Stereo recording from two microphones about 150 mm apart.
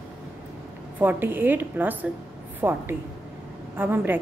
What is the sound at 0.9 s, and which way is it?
A woman's voice, 15° right (ahead or behind).